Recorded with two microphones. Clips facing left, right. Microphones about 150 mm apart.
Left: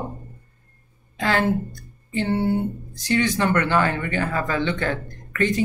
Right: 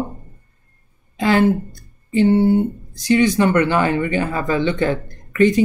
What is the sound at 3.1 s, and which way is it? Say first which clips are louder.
Speech: right 6 dB; 15° right (ahead or behind).